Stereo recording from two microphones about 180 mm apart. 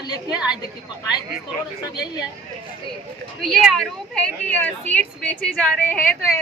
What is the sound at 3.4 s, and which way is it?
A woman's voice, 5° left (ahead or behind).